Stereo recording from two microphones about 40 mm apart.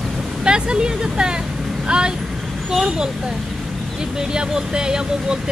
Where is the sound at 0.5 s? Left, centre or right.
Right.